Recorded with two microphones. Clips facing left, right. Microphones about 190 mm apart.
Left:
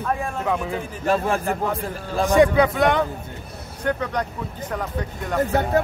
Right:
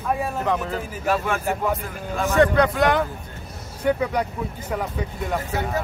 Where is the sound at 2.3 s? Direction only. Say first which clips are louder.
Left 2 dB; 10° left (ahead or behind); by 4.3 s 10° right (ahead or behind).